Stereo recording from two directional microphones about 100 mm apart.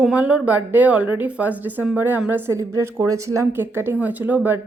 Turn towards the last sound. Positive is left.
turn(degrees=-15)  # may be behind; listen again after turning